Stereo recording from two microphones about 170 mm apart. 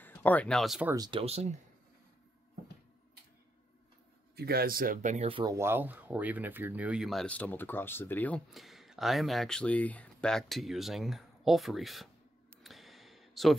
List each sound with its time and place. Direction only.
0.0 s speech: 10° left (ahead or behind)
0.8 s speech: 20° right (ahead or behind)
1.2 s speech: 40° right (ahead or behind)
4.4 s speech: 65° right (ahead or behind); by 5.4 s 40° right (ahead or behind)
5.4 s speech: 15° right (ahead or behind); by 8.4 s 10° left (ahead or behind)
8.5 s speech: centre (ahead or behind)
12.6 s a sound: centre (ahead or behind)